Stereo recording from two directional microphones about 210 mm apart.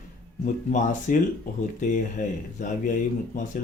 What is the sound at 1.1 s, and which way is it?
A man's voice, 40° left (ahead or behind).